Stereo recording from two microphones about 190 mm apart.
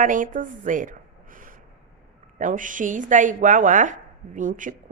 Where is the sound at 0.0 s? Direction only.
45° right (ahead or behind).